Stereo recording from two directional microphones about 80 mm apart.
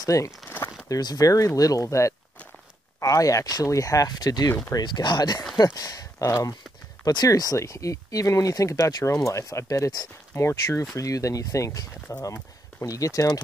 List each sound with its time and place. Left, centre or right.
0.0 s speech: left
4.7 s speech: left
5.8 s speech: left
10.3 s speech: left